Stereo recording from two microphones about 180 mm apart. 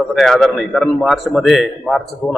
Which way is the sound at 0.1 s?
Centre (ahead or behind).